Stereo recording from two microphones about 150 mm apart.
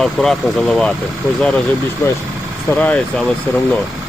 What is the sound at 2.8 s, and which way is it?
Speech, 10° left (ahead or behind).